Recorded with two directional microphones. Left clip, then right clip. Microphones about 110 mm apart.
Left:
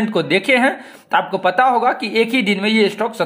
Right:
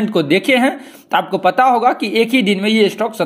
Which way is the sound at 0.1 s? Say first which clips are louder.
Right 2 dB; 20° right (ahead or behind).